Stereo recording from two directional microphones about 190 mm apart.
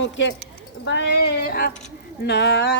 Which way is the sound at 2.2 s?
65° left (ahead or behind).